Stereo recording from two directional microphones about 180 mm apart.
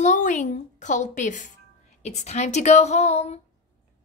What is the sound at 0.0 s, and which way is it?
A woman's voice, 45° left (ahead or behind).